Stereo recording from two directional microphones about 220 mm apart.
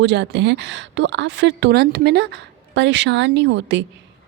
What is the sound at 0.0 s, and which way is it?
A woman's voice, 55° right (ahead or behind).